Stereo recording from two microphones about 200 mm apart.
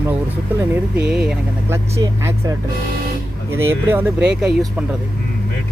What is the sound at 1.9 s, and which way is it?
Speech, 15° right (ahead or behind).